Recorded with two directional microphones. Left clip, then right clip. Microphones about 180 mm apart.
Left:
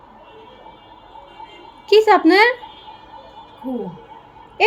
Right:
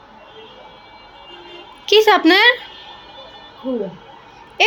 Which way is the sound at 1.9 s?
5° left (ahead or behind).